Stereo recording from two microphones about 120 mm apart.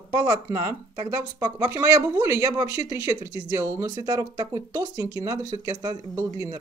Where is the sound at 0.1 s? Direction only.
30° right (ahead or behind).